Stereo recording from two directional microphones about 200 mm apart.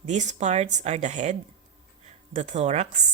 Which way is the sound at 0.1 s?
35° right (ahead or behind).